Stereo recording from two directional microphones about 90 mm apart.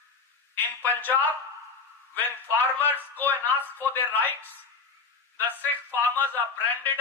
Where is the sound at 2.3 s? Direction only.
20° left (ahead or behind).